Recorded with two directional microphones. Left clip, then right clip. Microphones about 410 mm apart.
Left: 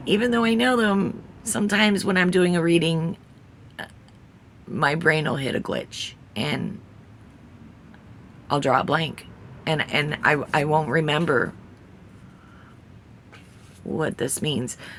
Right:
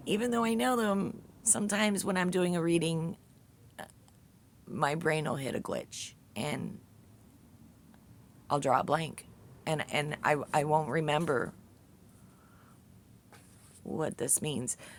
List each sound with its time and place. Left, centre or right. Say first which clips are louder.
0.0 s a woman's voice: left 9 dB; right
3.8 s burping: left 10 dB; right
4.7 s a woman's voice: left 10 dB; right
8.4 s a woman's voice: left 7 dB; right
13.9 s a woman's voice: left 8 dB; right